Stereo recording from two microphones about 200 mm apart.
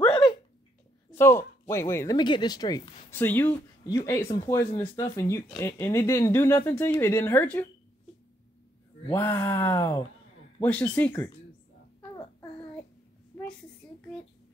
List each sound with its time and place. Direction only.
0.0 s a sound: 30° left (ahead or behind)
1.1 s speech: 10° left (ahead or behind)
9.1 s speech: 10° left (ahead or behind)